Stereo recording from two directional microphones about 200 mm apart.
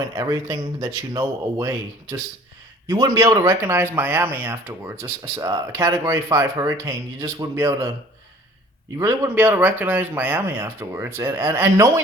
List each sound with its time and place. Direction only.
0.2 s speech: 20° right (ahead or behind)
9.0 s speech: 15° right (ahead or behind)